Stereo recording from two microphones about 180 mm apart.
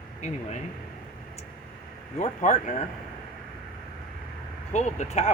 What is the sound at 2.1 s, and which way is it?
Speech, 45° left (ahead or behind).